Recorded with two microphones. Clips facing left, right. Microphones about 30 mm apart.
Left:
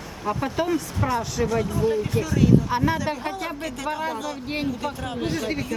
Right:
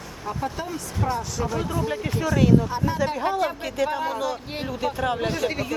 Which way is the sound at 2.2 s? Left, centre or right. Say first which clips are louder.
Right 4 dB; centre.